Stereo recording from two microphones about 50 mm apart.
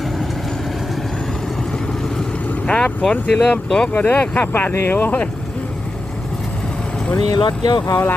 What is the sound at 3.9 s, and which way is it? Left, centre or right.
Speech, left.